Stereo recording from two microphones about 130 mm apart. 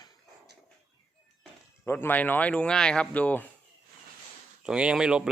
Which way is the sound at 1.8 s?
15° left (ahead or behind).